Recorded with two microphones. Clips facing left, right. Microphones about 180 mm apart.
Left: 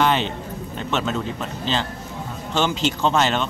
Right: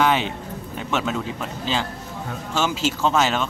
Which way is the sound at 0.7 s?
5° right (ahead or behind).